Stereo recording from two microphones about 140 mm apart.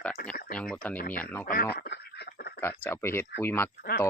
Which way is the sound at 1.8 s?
90° left.